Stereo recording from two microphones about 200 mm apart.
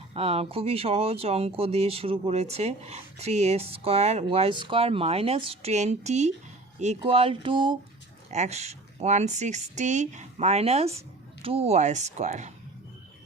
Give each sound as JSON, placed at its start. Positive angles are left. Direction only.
{"t": 0.1, "sound": "speech", "side_deg": -30}